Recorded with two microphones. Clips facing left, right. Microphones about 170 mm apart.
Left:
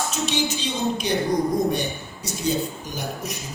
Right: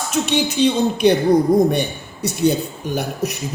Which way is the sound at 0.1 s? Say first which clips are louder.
Right 5 dB; 60° right (ahead or behind).